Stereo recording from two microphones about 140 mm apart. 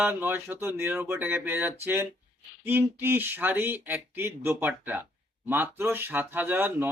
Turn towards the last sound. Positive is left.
turn(degrees=-15)  # may be behind; listen again after turning